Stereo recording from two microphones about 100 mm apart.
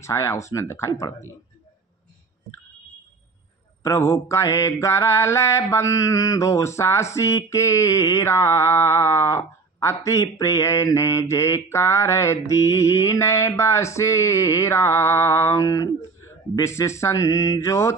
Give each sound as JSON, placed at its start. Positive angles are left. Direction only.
{"t": 0.0, "sound": "mantra", "side_deg": 30}
{"t": 3.8, "sound": "mantra", "side_deg": 30}